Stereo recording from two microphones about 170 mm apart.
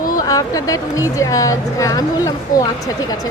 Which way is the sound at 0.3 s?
20° left (ahead or behind).